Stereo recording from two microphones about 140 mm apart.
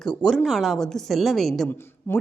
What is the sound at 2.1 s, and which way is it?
Speech, 15° left (ahead or behind).